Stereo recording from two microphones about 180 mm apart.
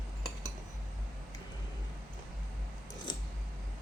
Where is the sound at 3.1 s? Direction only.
25° left (ahead or behind).